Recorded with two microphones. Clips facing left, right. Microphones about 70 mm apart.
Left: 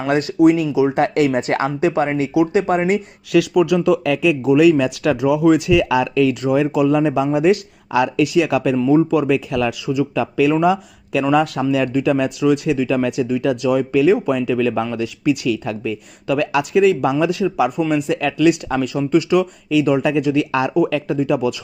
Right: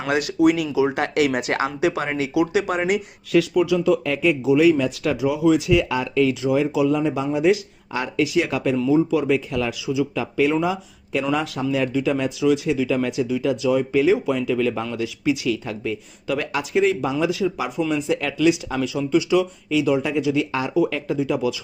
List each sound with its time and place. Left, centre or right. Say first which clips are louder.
0.1 s speech: left 4 dB; left
3.3 s speech: left 3 dB; left
4.4 s speech: left 4 dB; left
8.8 s speech: left 3 dB; left
16.2 s speech: left 7 dB; left
18.9 s speech: left 3 dB; left